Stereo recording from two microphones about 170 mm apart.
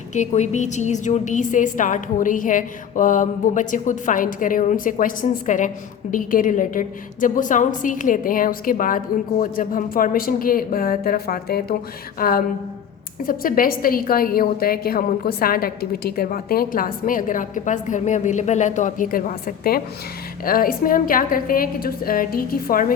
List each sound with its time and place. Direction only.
0.1 s a woman's voice: 45° left (ahead or behind)